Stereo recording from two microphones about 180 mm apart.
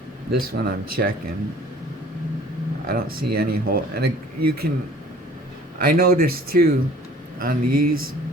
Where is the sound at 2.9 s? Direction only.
55° right (ahead or behind).